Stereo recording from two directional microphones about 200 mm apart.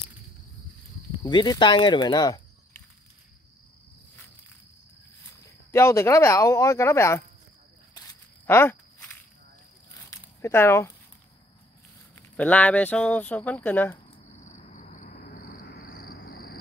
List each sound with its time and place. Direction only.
1.2 s speech: 20° left (ahead or behind)
5.4 s speech: 15° left (ahead or behind)
8.5 s walk: 10° left (ahead or behind)
9.8 s a sound: 15° left (ahead or behind)
12.2 s speech: 5° left (ahead or behind)
14.3 s cricket: 35° left (ahead or behind)